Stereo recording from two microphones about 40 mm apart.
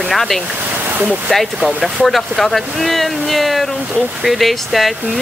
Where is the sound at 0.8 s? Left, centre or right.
Right.